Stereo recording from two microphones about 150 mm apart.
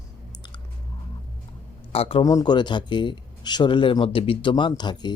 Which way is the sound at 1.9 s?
40° left (ahead or behind).